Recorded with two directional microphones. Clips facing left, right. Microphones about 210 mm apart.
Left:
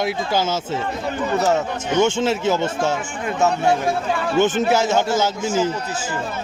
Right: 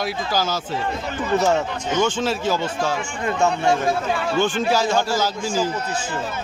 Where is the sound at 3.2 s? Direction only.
5° left (ahead or behind).